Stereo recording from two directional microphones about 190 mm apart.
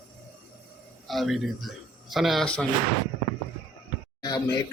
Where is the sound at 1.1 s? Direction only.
Centre (ahead or behind).